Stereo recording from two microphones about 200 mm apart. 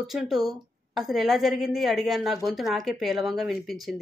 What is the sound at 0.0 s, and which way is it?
A woman's voice, centre (ahead or behind).